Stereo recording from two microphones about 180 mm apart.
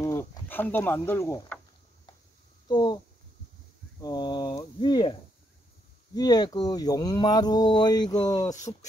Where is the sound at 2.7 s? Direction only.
25° left (ahead or behind).